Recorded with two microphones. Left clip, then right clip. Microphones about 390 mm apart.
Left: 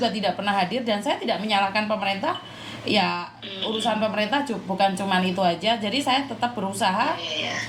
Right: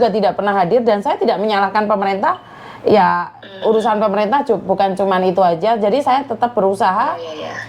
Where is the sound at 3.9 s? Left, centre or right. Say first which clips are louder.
Right 9 dB; right.